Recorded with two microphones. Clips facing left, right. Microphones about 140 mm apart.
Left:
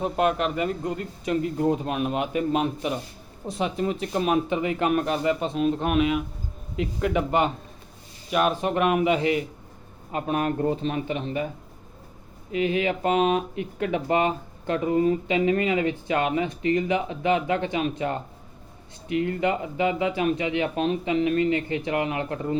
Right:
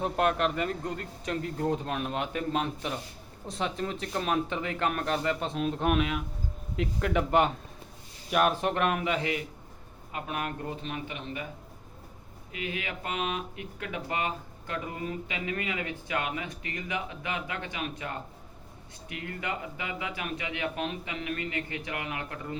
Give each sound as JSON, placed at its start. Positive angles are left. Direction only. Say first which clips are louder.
{"t": 0.0, "sound": "a man's voice", "louder": "left 3 dB", "side_deg": 5}
{"t": 10.1, "sound": "speech", "louder": "left 9 dB", "side_deg": 35}
{"t": 12.5, "sound": "speech", "louder": "left 12 dB", "side_deg": 30}